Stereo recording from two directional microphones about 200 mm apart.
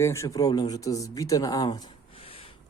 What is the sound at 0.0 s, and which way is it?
Speech, 15° left (ahead or behind).